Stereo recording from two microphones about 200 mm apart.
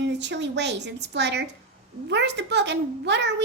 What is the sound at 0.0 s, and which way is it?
A child's voice, 60° right (ahead or behind).